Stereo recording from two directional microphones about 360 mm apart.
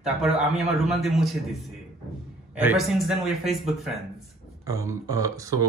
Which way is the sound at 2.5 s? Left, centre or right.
Centre.